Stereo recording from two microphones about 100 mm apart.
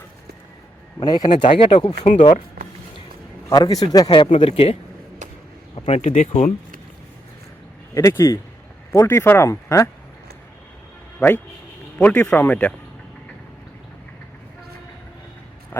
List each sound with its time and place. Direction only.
0.9 s speech: 45° left (ahead or behind)
1.4 s speech: 60° left (ahead or behind)
3.5 s a man's voice: 40° left (ahead or behind)
4.1 s speech: 60° left (ahead or behind); by 4.8 s 75° left (ahead or behind)
5.7 s speech: 90° left
7.9 s a man's voice: 30° left (ahead or behind)
11.9 s speech: 15° left (ahead or behind)